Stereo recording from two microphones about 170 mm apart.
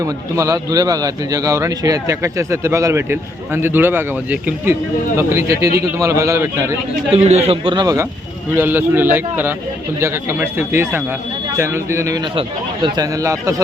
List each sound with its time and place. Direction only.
0.0 s speech: 20° right (ahead or behind)
7.1 s a man's voice: 40° right (ahead or behind); by 8.0 s 25° right (ahead or behind)
8.5 s a man's voice: 10° right (ahead or behind)